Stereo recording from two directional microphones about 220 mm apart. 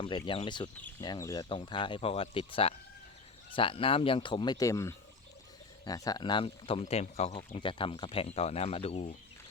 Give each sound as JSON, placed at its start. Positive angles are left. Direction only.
{"t": 0.0, "sound": "speech", "side_deg": 25}